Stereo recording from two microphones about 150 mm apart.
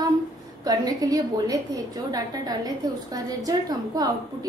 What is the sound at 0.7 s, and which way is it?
A woman's voice, 25° right (ahead or behind).